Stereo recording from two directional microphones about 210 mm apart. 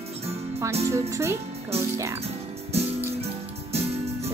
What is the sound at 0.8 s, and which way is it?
Speech, 15° right (ahead or behind).